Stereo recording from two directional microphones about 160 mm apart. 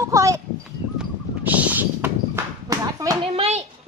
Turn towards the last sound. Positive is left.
turn(degrees=-40)  # may be behind; listen again after turning